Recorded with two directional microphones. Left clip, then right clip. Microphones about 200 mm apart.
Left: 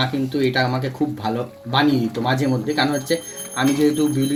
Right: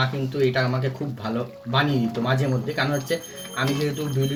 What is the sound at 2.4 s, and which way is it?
Speech, 45° left (ahead or behind).